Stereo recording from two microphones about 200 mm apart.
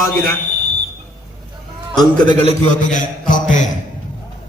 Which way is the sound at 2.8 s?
40° left (ahead or behind).